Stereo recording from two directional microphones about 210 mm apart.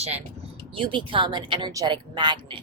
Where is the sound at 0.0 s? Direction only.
30° right (ahead or behind).